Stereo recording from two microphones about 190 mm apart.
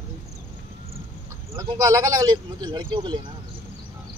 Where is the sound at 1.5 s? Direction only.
15° right (ahead or behind).